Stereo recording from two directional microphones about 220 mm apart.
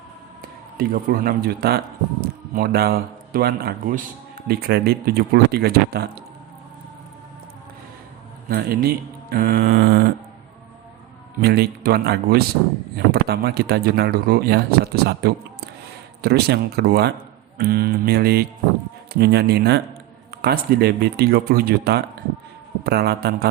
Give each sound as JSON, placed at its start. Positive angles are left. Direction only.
{"t": 0.8, "sound": "a man's voice", "side_deg": -45}
{"t": 8.4, "sound": "speech", "side_deg": -45}
{"t": 11.3, "sound": "speech", "side_deg": -45}